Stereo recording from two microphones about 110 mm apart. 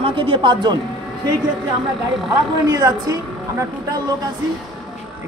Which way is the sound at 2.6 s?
35° right (ahead or behind).